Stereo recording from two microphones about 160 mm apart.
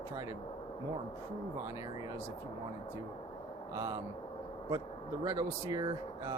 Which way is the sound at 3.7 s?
20° right (ahead or behind).